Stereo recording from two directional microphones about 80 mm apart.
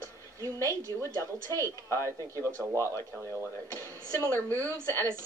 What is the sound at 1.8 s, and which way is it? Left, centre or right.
Speech, left.